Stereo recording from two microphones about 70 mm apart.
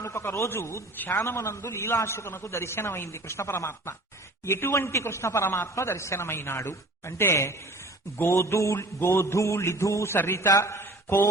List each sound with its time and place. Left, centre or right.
0.0 s speech: left
8.2 s a sound: left
10.3 s a man's voice: left